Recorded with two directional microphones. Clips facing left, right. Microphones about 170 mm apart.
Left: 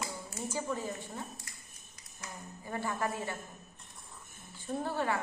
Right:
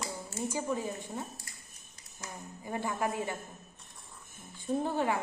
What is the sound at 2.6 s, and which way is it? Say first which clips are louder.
Speech: right 2 dB; 15° right (ahead or behind).